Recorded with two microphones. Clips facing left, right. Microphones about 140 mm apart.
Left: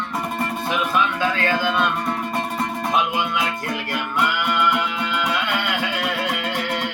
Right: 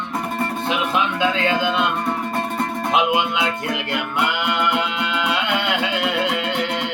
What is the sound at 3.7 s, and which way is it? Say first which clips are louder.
Music: right 2 dB; 20° right (ahead or behind).